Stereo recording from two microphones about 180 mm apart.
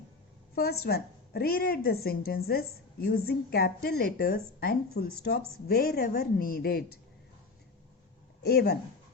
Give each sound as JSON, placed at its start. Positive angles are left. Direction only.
{"t": 0.5, "sound": "a woman's voice", "side_deg": 60}
{"t": 8.4, "sound": "speech", "side_deg": 60}